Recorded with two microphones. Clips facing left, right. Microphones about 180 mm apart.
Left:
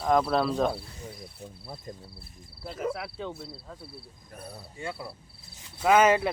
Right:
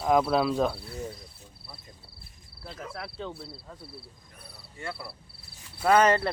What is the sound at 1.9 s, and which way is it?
Speech, 50° left (ahead or behind).